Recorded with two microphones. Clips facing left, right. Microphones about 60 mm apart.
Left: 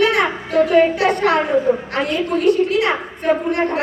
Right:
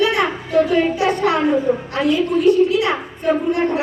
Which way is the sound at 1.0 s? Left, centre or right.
Left.